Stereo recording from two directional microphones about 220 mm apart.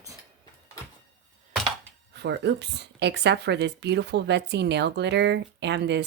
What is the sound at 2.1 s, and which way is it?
Speech, 50° right (ahead or behind).